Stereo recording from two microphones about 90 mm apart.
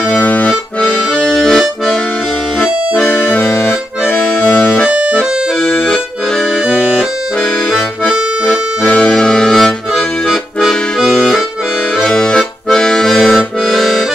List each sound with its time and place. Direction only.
0.0 s accordion: 15° left (ahead or behind)
2.6 s accordion: 20° left (ahead or behind)
5.2 s accordion: 5° right (ahead or behind)
5.9 s accordion: 10° left (ahead or behind)